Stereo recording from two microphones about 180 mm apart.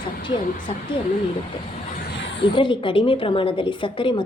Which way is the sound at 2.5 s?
25° left (ahead or behind).